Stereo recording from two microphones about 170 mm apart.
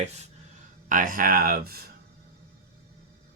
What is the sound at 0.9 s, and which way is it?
Speech, 50° right (ahead or behind).